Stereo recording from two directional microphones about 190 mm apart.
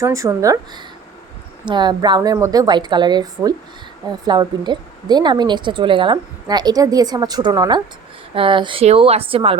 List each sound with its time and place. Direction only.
0.0 s a woman's voice: 15° right (ahead or behind)